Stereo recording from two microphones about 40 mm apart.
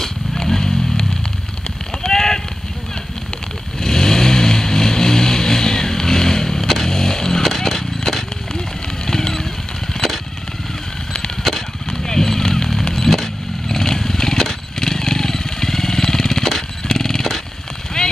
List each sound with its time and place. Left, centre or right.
0.0 s wild animals: centre
2.0 s vehicle: centre
3.8 s vehicle: centre
7.4 s horse: centre
9.0 s vehicle: centre
9.9 s a sound: centre
11.4 s a sound: centre
12.9 s motorcycle: centre
18.0 s vehicle: centre